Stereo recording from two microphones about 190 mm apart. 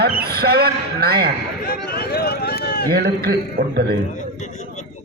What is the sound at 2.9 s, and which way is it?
Speech, 55° right (ahead or behind).